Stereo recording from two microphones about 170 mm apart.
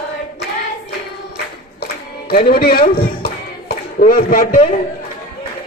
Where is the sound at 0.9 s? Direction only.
75° left (ahead or behind).